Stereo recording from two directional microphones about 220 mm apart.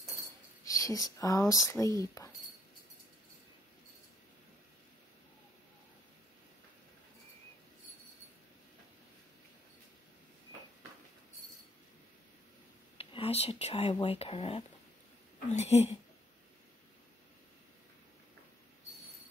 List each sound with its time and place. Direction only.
0.7 s speech: 15° left (ahead or behind)
12.9 s a woman's voice: 25° left (ahead or behind)